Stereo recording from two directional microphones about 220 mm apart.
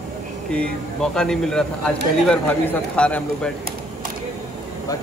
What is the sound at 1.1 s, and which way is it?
A man's voice, 5° left (ahead or behind).